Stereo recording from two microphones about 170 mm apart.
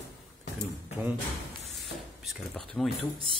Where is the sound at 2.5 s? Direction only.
Centre (ahead or behind).